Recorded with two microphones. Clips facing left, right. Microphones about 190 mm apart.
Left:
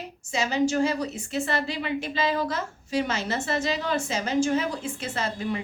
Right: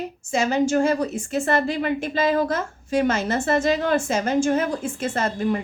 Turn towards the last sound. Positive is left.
turn(degrees=-50)  # may be behind; listen again after turning